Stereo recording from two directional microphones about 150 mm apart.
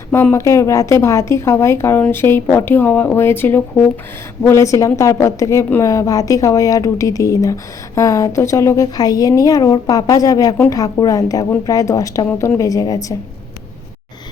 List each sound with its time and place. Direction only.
0.1 s a woman's voice: 15° left (ahead or behind)